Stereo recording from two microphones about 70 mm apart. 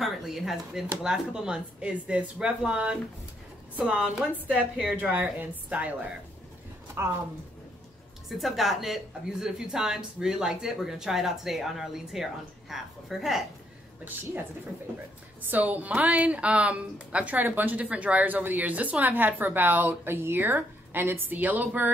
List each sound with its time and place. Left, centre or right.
0.0 s a woman's voice: centre
8.3 s a woman's voice: centre
15.5 s a woman's voice: right